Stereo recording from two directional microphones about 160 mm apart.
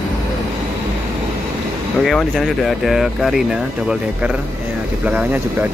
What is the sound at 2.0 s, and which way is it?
Speech, centre (ahead or behind).